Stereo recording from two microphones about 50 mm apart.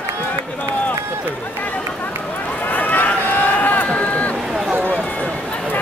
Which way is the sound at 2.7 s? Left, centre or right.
Left.